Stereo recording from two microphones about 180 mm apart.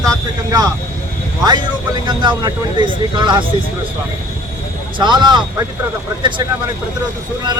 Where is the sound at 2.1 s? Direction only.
25° right (ahead or behind).